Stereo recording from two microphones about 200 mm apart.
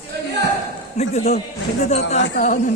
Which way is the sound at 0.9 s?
35° left (ahead or behind).